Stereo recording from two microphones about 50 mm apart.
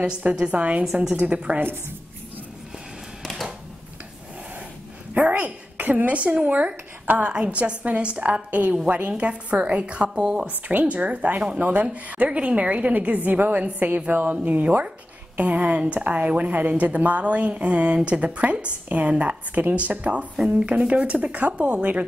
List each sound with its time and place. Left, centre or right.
0.0 s a woman's voice: right
1.6 s a woman's voice: right
3.2 s a sound: centre
5.1 s a woman's voice: right
10.5 s a woman's voice: right
10.9 s a woman's voice: right